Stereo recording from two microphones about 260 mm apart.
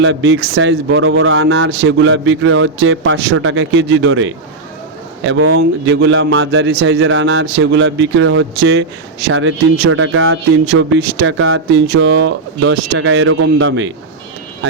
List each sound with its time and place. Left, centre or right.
0.0 s speech: right